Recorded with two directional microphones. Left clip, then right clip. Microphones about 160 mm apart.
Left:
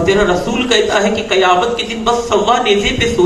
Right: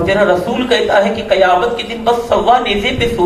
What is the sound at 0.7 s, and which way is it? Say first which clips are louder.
A woman's voice: right 1 dB; 45° left (ahead or behind).